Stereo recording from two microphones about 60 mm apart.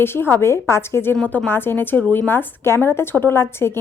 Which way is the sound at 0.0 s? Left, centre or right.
Left.